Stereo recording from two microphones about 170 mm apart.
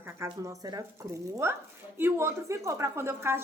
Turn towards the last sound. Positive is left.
turn(degrees=-15)  # may be behind; listen again after turning